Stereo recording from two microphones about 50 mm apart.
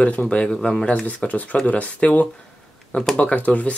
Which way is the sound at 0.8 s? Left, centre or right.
Left.